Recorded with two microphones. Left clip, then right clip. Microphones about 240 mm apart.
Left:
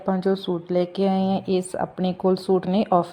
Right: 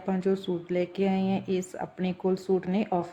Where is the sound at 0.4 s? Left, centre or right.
Centre.